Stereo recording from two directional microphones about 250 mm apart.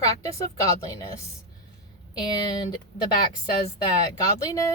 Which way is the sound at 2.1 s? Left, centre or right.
Centre.